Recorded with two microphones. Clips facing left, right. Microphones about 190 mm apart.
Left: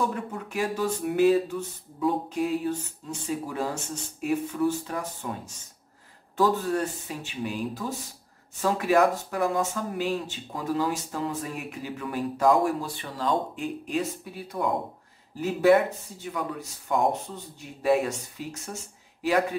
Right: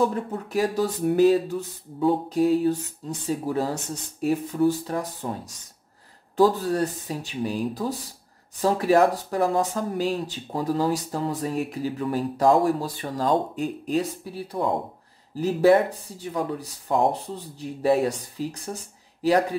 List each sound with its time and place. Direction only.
0.0 s speech: 35° right (ahead or behind)